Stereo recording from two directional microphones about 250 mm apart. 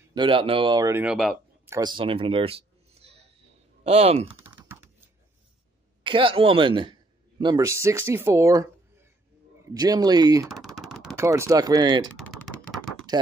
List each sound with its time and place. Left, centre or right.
0.1 s speech: centre
1.8 s a sound: centre
3.8 s speech: right
4.4 s typing: centre
6.0 s a man's voice: right
10.5 s speech: centre
12.1 s typing: centre